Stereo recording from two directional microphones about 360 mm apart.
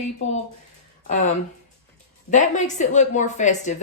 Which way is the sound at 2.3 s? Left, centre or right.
Centre.